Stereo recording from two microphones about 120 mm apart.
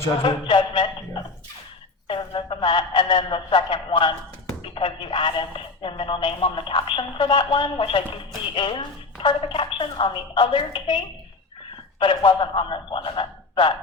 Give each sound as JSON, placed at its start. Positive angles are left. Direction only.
{"t": 0.2, "sound": "a sound", "side_deg": 40}
{"t": 2.0, "sound": "speech", "side_deg": 45}
{"t": 11.9, "sound": "speech", "side_deg": 45}